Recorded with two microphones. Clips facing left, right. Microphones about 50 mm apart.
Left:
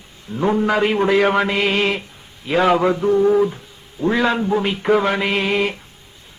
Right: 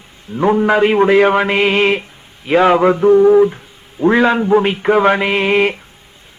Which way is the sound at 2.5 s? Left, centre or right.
Right.